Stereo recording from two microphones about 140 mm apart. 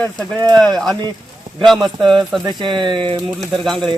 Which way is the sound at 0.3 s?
30° right (ahead or behind).